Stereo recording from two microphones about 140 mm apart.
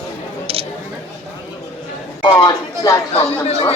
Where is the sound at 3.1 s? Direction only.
45° left (ahead or behind).